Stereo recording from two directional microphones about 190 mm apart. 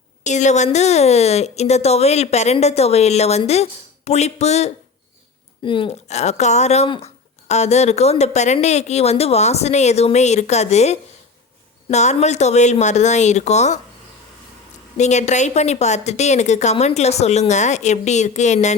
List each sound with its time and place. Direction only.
0.3 s speech: 40° left (ahead or behind)
14.9 s speech: 40° left (ahead or behind)